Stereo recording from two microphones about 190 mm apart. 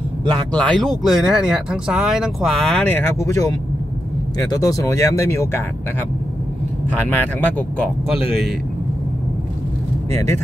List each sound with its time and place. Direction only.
0.5 s speech: 5° left (ahead or behind)
6.9 s speech: 10° left (ahead or behind)
10.1 s speech: 15° left (ahead or behind)